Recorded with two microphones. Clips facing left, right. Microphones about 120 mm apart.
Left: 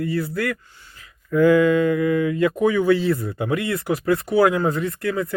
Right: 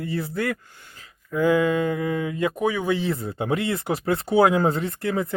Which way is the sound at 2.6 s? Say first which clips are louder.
Left 6 dB; 10° right (ahead or behind).